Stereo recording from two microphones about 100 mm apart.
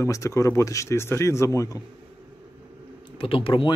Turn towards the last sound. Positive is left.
turn(degrees=65)  # may be behind; listen again after turning